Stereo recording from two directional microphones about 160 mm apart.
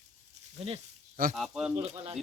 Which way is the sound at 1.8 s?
40° right (ahead or behind).